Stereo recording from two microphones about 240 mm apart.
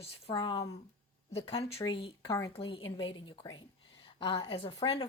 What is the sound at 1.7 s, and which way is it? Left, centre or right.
A woman's voice, left.